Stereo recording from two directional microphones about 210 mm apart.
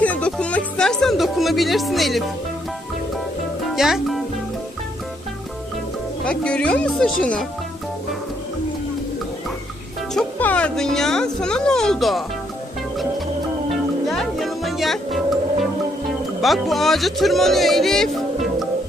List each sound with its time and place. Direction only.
0.0 s music: 5° left (ahead or behind)
3.6 s music: centre (ahead or behind)
6.2 s speech: 5° left (ahead or behind)
10.2 s speech: 5° left (ahead or behind)
14.1 s music: centre (ahead or behind)
16.0 s speech: centre (ahead or behind)